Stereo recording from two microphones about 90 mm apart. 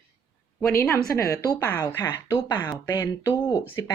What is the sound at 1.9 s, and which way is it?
Speech, 30° left (ahead or behind).